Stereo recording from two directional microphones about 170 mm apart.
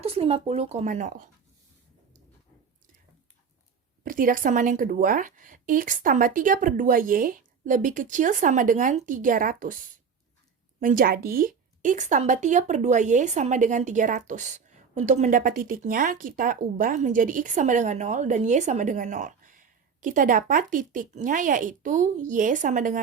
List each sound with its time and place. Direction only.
0.0 s speech: 35° right (ahead or behind)
4.0 s a woman's voice: 55° right (ahead or behind)